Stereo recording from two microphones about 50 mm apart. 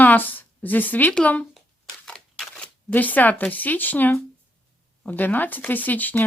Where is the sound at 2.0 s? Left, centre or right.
Centre.